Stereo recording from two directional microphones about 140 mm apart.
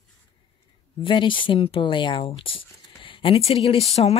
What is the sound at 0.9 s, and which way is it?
Speech, 35° left (ahead or behind).